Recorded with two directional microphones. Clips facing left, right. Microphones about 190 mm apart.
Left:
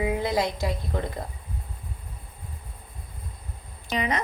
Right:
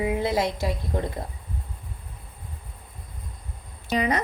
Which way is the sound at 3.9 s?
40° right (ahead or behind).